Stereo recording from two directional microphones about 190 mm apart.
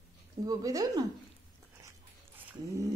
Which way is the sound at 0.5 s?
20° right (ahead or behind).